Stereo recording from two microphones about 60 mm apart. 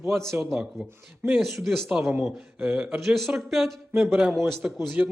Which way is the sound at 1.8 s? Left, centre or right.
Centre.